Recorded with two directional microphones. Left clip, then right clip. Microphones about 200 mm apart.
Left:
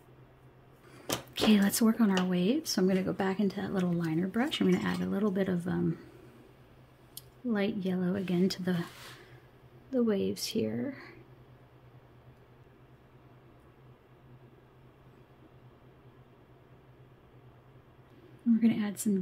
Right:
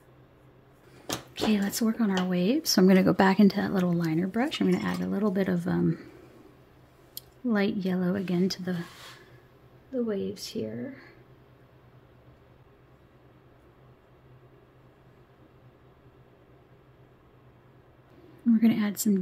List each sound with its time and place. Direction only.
1.0 s speech: 15° left (ahead or behind); by 2.6 s 5° right (ahead or behind)
2.6 s speech: 25° right (ahead or behind)
7.2 s speech: 15° right (ahead or behind)
9.8 s speech: 25° left (ahead or behind)
18.6 s speech: 15° right (ahead or behind)